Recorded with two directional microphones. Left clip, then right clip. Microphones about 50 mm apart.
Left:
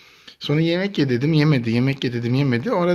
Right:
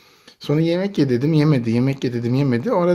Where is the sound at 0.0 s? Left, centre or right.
Centre.